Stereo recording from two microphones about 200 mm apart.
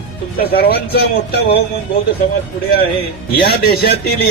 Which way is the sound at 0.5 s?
50° left (ahead or behind).